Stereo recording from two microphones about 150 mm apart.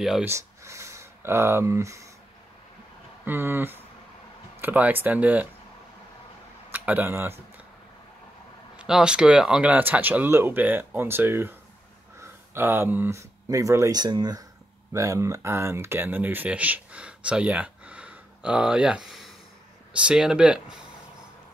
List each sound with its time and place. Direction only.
0.0 s speech: 5° right (ahead or behind)
0.3 s speech: 20° right (ahead or behind)
3.3 s speech: 15° right (ahead or behind)
6.7 s speech: 10° right (ahead or behind)
8.7 s speech: 5° right (ahead or behind)